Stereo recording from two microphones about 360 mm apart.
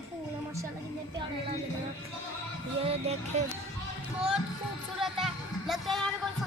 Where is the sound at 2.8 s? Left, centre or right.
Centre.